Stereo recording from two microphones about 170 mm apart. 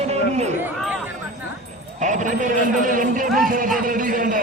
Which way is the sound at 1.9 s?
45° right (ahead or behind).